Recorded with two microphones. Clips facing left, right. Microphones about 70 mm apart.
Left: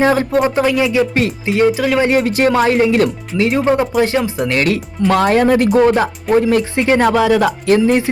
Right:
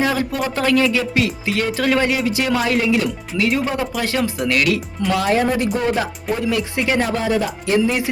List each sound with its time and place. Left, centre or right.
0.0 s speech: left
0.5 s speech: centre
1.7 s speech: centre
2.0 s speech: left
2.5 s speech: left
6.3 s speech: left
7.1 s speech: left